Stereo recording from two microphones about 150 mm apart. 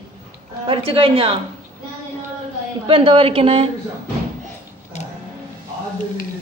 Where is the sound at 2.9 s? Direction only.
35° right (ahead or behind).